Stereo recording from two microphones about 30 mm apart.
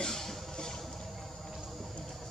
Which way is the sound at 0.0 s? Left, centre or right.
Centre.